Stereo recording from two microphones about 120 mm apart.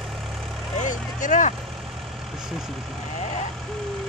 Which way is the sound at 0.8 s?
90° left.